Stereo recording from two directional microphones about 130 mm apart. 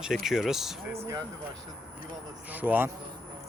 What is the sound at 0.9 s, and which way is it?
Speech, 25° right (ahead or behind).